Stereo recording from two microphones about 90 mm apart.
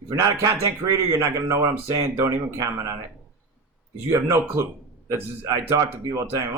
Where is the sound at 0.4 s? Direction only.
35° right (ahead or behind).